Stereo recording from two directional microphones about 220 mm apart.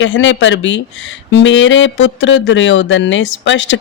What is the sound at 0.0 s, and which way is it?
Speech, 55° left (ahead or behind).